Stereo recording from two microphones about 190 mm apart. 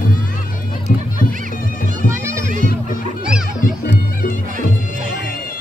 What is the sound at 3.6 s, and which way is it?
Bagpipes, 45° left (ahead or behind).